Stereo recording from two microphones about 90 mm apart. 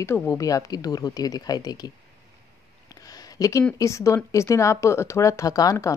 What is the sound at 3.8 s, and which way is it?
A woman's voice, 35° left (ahead or behind).